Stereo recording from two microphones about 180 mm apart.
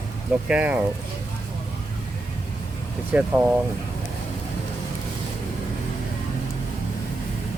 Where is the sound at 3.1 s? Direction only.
5° right (ahead or behind).